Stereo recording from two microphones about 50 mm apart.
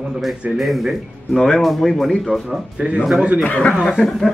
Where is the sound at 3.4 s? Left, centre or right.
Left.